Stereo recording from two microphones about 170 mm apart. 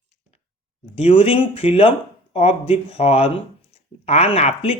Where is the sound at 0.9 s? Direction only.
35° left (ahead or behind).